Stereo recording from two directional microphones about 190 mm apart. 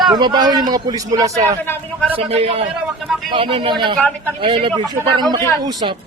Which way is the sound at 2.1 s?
30° right (ahead or behind).